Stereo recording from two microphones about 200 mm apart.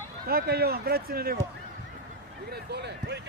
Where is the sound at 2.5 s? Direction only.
55° right (ahead or behind).